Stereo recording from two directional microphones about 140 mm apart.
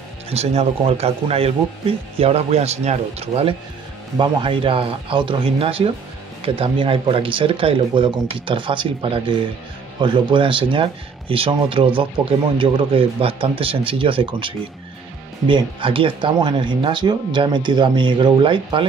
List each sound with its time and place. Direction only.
0.3 s a man's voice: 45° right (ahead or behind)